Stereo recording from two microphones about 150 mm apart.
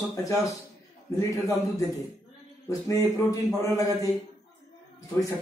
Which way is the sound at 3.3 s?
20° left (ahead or behind).